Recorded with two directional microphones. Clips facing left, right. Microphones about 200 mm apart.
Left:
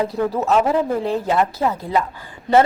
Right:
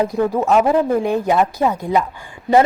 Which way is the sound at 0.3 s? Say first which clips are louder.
Right 3 dB; 10° right (ahead or behind).